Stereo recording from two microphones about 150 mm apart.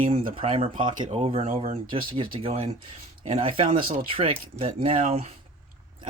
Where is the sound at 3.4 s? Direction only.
35° right (ahead or behind).